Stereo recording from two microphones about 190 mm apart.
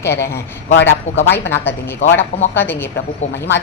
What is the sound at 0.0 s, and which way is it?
Speech, 15° left (ahead or behind).